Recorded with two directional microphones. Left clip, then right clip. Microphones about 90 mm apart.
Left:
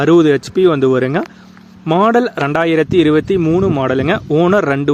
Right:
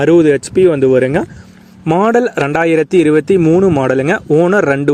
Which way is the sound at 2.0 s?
45° right (ahead or behind).